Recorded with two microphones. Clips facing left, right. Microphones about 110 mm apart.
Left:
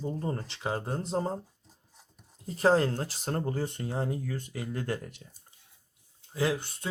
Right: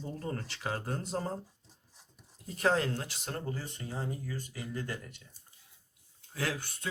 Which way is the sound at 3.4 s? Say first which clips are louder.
Left 7 dB; 55° left (ahead or behind).